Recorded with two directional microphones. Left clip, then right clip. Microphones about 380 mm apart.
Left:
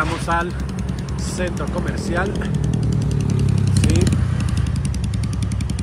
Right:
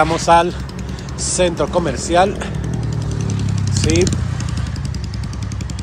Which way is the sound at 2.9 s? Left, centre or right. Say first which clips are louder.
Left 1 dB; left.